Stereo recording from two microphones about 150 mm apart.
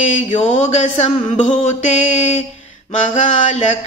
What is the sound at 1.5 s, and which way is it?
Mantra, 45° left (ahead or behind).